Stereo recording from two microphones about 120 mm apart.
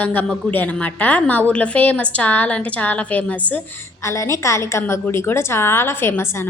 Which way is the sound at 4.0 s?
25° left (ahead or behind).